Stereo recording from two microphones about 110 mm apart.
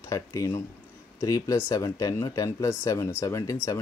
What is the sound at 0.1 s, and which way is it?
Speech, 30° left (ahead or behind).